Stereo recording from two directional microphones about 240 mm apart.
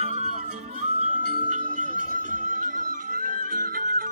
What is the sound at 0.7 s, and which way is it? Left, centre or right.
Music, right.